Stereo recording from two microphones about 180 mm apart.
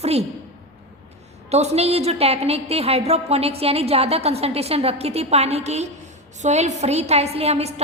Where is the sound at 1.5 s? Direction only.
35° right (ahead or behind).